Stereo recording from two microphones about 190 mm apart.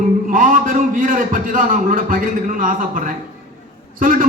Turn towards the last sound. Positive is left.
turn(degrees=-45)  # may be behind; listen again after turning